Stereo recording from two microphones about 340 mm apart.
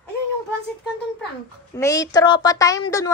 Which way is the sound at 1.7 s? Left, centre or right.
Centre.